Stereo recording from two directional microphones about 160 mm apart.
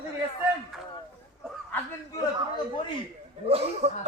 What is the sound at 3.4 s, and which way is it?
Speech, 40° right (ahead or behind).